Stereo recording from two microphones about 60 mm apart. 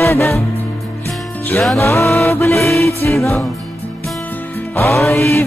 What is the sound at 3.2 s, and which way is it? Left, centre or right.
Mantra, left.